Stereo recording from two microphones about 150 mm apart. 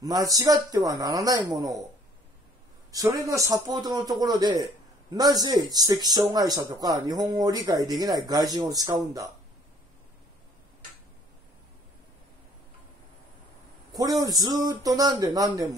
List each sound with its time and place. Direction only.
0.0 s speech: 25° right (ahead or behind)
2.9 s speech: 20° right (ahead or behind)
13.9 s speech: 25° right (ahead or behind)